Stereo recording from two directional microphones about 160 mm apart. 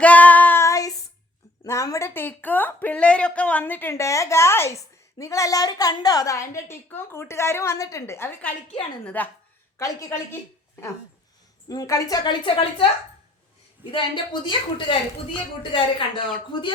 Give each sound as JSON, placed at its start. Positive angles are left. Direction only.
{"t": 0.0, "sound": "child singing", "side_deg": 10}
{"t": 1.6, "sound": "a woman's voice", "side_deg": 20}
{"t": 11.7, "sound": "a woman's voice", "side_deg": 20}
{"t": 13.8, "sound": "a woman's voice", "side_deg": -10}
{"t": 14.4, "sound": "speech", "side_deg": 30}